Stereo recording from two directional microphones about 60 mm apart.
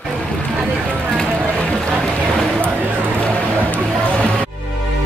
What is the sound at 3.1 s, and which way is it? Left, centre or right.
Music, centre.